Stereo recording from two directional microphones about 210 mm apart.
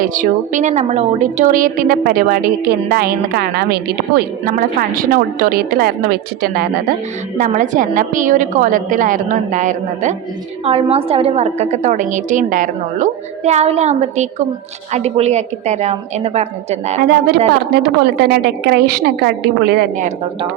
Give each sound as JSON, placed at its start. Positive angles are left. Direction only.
{"t": 0.0, "sound": "a woman's voice", "side_deg": -40}
{"t": 17.0, "sound": "a woman's voice", "side_deg": -45}